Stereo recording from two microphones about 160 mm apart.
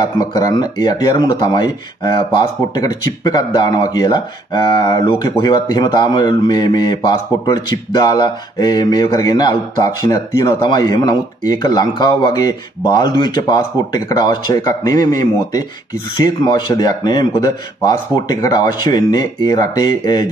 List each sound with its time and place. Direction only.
0.0 s speech: 25° left (ahead or behind)